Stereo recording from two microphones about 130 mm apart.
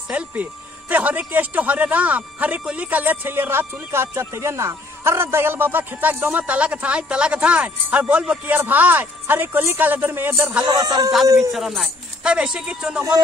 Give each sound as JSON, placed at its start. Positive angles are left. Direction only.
{"t": 0.1, "sound": "speech", "side_deg": -10}
{"t": 10.6, "sound": "music", "side_deg": -30}
{"t": 11.3, "sound": "speech", "side_deg": 0}